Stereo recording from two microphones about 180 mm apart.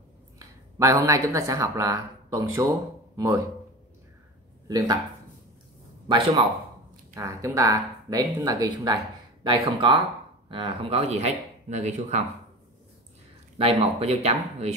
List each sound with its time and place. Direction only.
0.4 s speech: 15° right (ahead or behind)
4.6 s speech: 20° right (ahead or behind)
6.0 s speech: 25° right (ahead or behind); by 12.2 s 40° right (ahead or behind)
13.6 s speech: 30° right (ahead or behind)